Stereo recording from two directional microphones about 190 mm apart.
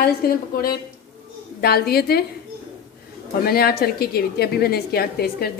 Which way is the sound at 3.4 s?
55° left (ahead or behind).